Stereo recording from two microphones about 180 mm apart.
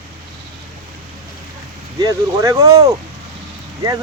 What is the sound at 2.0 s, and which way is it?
Speech, 20° right (ahead or behind).